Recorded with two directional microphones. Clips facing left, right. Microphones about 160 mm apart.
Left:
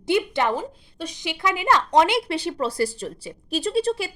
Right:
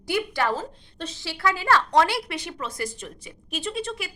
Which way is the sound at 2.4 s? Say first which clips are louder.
Left 8 dB; 35° left (ahead or behind).